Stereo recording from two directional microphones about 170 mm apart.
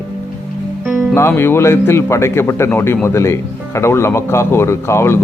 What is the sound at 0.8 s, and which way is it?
Music, 10° right (ahead or behind).